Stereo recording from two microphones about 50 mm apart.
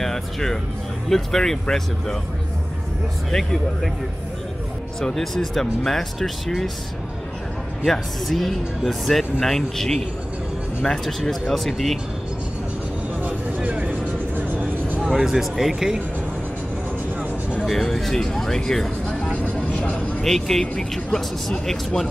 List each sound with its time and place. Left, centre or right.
0.0 s music: centre
1.0 s speech: centre
3.3 s speech: centre
5.0 s speech: centre
7.9 s speech: centre
13.2 s vehicle: right
15.2 s speech: centre
17.6 s speech: centre
19.3 s vehicle: left
20.2 s speech: centre